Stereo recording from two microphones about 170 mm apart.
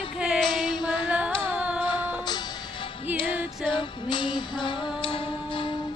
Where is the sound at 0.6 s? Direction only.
25° left (ahead or behind).